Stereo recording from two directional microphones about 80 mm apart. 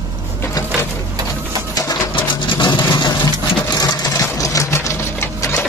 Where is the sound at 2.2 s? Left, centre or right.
Left.